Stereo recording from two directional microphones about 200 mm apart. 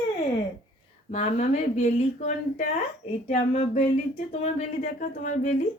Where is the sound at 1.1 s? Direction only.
35° left (ahead or behind).